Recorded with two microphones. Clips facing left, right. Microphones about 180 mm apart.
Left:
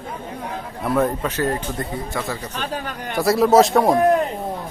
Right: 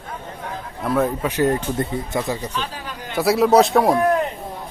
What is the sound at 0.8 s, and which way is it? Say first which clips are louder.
Speech: even; centre (ahead or behind).